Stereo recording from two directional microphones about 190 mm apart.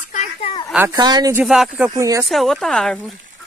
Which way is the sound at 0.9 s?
20° right (ahead or behind).